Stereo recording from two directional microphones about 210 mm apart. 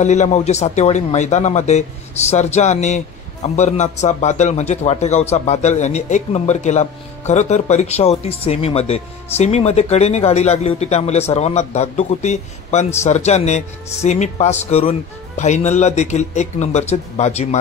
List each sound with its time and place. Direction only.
0.0 s a man's voice: 35° left (ahead or behind)